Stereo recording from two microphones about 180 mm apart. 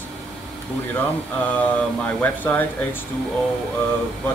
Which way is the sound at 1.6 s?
10° left (ahead or behind).